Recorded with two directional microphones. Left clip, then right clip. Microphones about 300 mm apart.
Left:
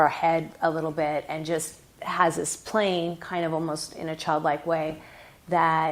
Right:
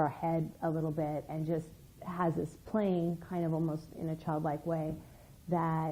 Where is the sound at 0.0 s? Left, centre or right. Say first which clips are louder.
Left 11 dB; centre.